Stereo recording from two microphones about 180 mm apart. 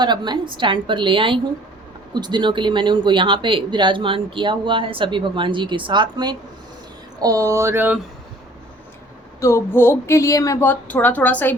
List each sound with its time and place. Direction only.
0.0 s speech: 25° right (ahead or behind)
7.2 s a sound: 20° right (ahead or behind)
9.4 s speech: 15° left (ahead or behind)